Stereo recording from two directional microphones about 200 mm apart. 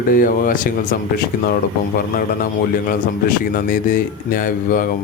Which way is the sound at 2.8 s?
45° left (ahead or behind).